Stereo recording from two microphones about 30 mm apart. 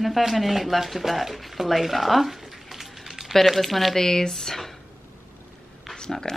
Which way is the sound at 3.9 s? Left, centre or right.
Centre.